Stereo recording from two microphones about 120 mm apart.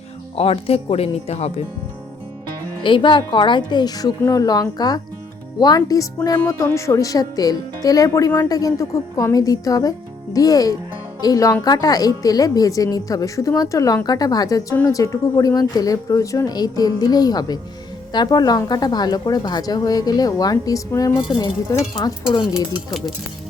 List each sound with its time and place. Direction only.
0.3 s speech: 55° left (ahead or behind)
2.8 s a woman's voice: 40° left (ahead or behind)